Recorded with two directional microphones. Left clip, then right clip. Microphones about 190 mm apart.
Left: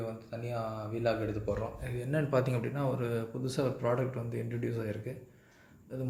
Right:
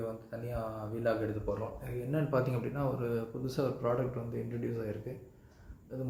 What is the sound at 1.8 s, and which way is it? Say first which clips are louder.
Speech: left 2 dB; 15° left (ahead or behind).